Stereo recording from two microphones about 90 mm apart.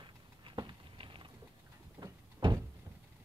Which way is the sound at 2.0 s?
80° right.